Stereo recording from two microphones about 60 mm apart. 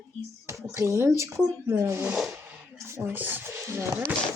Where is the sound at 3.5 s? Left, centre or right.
Right.